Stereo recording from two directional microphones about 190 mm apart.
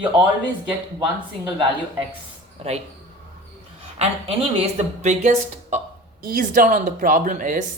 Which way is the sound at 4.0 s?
35° right (ahead or behind).